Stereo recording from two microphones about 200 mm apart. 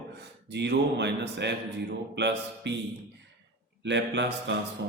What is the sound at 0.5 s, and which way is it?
A man's voice, 60° right (ahead or behind).